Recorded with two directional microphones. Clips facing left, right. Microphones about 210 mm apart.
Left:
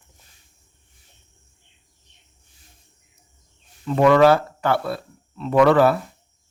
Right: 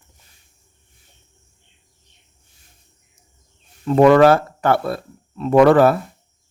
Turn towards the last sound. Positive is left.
turn(degrees=-45)  # may be behind; listen again after turning